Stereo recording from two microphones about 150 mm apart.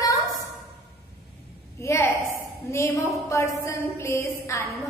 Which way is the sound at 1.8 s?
20° left (ahead or behind).